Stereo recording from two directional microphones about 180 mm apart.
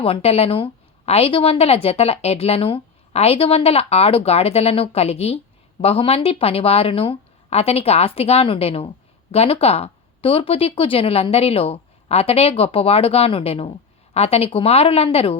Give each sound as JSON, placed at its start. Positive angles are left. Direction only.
{"t": 0.0, "sound": "a woman's voice", "side_deg": 30}